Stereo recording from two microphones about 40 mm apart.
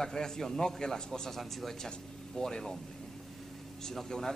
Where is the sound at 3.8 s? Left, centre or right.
Centre.